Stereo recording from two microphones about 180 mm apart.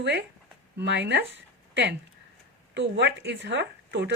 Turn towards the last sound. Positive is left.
turn(degrees=-75)  # may be behind; listen again after turning